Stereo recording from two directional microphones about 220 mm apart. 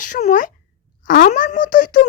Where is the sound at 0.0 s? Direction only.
35° left (ahead or behind).